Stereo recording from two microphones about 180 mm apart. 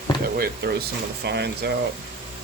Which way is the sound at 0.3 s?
60° right (ahead or behind).